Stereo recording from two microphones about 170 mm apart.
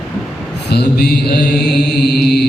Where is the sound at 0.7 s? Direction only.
70° left (ahead or behind).